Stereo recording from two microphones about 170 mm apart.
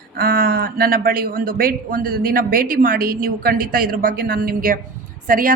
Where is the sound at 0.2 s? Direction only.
60° right (ahead or behind).